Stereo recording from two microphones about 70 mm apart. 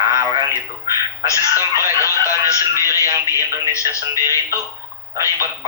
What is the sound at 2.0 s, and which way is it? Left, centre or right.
Speech, left.